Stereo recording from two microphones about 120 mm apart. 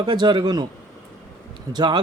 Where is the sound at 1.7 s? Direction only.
40° right (ahead or behind).